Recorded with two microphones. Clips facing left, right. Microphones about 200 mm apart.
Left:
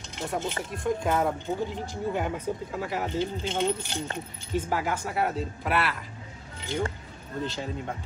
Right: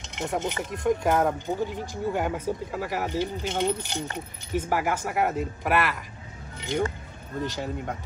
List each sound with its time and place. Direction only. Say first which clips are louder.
0.0 s speech: right 2 dB; 20° right (ahead or behind)
7.4 s speech: right 2 dB; 15° right (ahead or behind)